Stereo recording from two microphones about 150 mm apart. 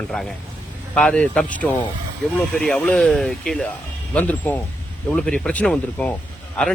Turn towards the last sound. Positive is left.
turn(degrees=10)  # may be behind; listen again after turning